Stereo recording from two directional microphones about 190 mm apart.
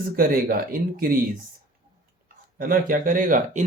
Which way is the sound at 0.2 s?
50° right (ahead or behind).